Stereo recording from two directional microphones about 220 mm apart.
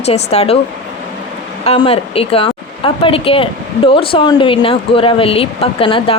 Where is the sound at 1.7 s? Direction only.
25° left (ahead or behind).